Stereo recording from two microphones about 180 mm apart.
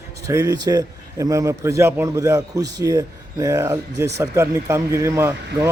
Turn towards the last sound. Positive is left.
turn(degrees=-15)  # may be behind; listen again after turning